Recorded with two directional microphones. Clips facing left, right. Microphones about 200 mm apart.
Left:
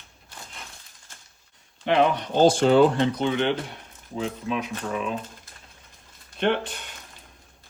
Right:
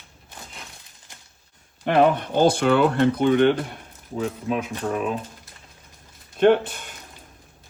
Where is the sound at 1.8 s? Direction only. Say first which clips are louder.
Right 3 dB; 50° right (ahead or behind).